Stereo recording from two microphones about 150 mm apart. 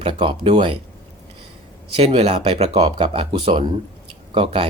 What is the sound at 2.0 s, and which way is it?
Speech, 45° right (ahead or behind).